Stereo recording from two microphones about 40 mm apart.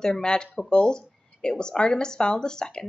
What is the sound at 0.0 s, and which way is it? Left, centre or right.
A woman's voice, centre.